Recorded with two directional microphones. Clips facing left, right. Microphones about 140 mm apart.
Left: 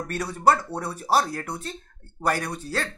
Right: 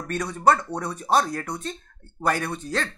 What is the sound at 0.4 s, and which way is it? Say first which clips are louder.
Speech: even; 10° left (ahead or behind).